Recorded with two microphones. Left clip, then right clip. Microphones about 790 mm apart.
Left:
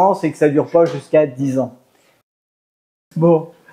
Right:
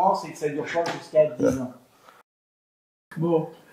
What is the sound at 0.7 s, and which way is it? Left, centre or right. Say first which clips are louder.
Speech: left 13 dB; left.